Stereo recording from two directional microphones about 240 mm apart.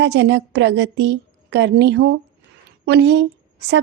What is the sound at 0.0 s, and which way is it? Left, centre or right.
A woman's voice, right.